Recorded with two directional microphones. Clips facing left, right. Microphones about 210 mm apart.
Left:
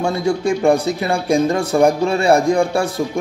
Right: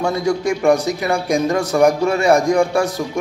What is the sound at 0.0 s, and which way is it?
A man's voice, 30° left (ahead or behind).